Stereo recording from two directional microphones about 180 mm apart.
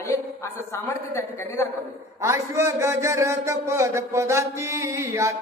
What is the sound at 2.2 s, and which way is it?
A man's voice, 15° right (ahead or behind).